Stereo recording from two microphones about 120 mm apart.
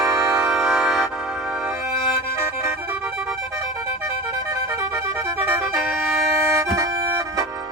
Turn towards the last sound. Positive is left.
turn(degrees=-25)  # may be behind; listen again after turning